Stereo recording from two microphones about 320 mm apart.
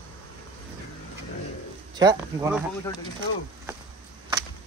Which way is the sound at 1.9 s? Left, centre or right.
Centre.